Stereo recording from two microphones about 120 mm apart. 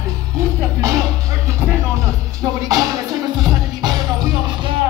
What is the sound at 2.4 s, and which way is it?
Music, 30° right (ahead or behind).